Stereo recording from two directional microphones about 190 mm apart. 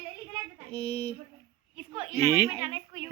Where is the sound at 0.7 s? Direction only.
30° left (ahead or behind).